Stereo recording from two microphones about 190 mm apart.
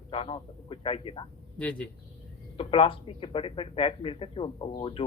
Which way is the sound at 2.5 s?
30° left (ahead or behind).